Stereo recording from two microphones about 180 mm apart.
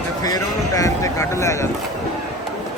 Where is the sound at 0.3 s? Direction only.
20° left (ahead or behind).